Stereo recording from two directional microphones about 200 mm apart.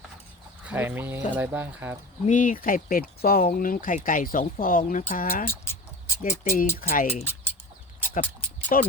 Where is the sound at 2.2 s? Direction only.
40° left (ahead or behind).